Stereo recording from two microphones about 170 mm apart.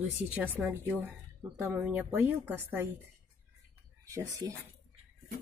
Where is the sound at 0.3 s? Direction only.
10° right (ahead or behind).